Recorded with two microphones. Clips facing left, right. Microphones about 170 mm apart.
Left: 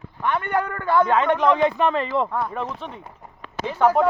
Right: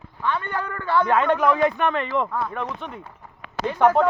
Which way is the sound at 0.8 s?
15° left (ahead or behind).